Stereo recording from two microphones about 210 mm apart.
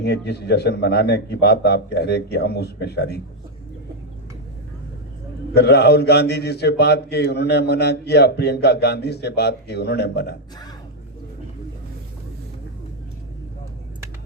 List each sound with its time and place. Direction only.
0.0 s a man's voice: 50° left (ahead or behind)
5.5 s a man's voice: 50° left (ahead or behind)